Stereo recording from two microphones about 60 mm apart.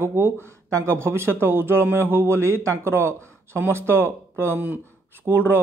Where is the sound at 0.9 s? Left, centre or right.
Right.